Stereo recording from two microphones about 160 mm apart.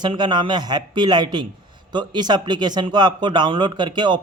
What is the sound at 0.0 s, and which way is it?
Speech, 30° right (ahead or behind).